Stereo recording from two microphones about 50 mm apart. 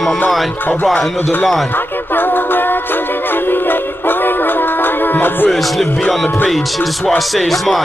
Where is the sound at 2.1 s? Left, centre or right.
Left.